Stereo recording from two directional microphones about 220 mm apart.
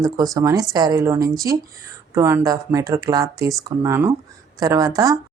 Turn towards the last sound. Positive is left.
turn(degrees=-15)  # may be behind; listen again after turning